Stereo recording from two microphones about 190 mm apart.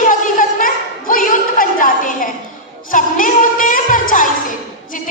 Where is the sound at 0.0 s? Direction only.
45° left (ahead or behind).